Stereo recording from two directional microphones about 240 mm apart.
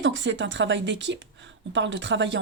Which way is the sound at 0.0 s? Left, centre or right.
Right.